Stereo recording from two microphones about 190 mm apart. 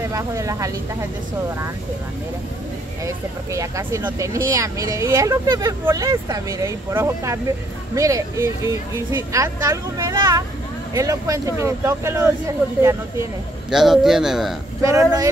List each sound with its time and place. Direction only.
0.1 s speech: 15° right (ahead or behind)
3.1 s speech: 15° right (ahead or behind)
13.7 s a man's voice: centre (ahead or behind)
14.8 s speech: 15° right (ahead or behind)